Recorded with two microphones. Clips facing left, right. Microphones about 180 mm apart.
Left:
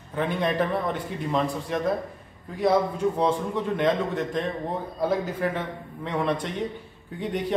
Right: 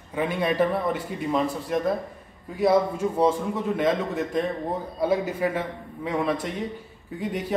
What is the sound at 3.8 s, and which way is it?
A man's voice, 5° right (ahead or behind).